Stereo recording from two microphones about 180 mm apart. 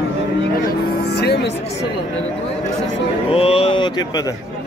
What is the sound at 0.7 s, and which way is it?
Speech, 65° left (ahead or behind).